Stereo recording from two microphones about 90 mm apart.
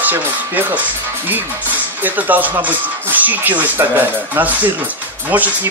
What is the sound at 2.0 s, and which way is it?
Speech, 20° right (ahead or behind).